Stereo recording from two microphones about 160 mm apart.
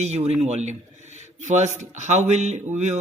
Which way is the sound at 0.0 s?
45° right (ahead or behind).